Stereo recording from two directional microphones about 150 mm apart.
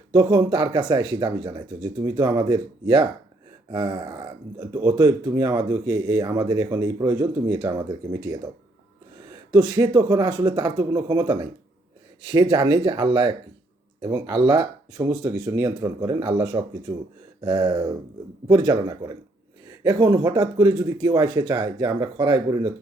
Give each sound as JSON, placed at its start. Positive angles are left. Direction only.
{"t": 0.1, "sound": "speech", "side_deg": -25}
{"t": 9.5, "sound": "speech", "side_deg": -25}